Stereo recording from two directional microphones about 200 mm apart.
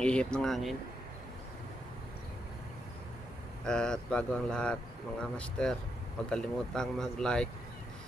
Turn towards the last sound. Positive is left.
turn(degrees=5)  # may be behind; listen again after turning